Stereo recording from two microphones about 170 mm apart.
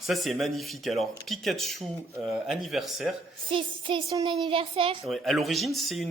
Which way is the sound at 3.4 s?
30° right (ahead or behind).